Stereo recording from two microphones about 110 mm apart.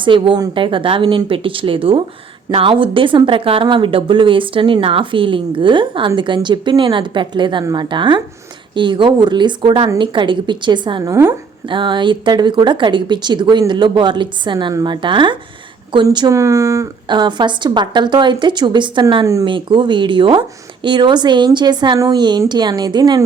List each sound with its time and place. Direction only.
0.0 s speech: 45° right (ahead or behind)
11.0 s speech: 25° right (ahead or behind)
11.7 s speech: 45° right (ahead or behind)
16.3 s speech: 30° right (ahead or behind)
17.1 s speech: 45° right (ahead or behind)
19.2 s speech: 30° right (ahead or behind)
19.5 s speech: 50° right (ahead or behind)
21.9 s speech: 30° right (ahead or behind)
22.4 s a woman's voice: 40° right (ahead or behind)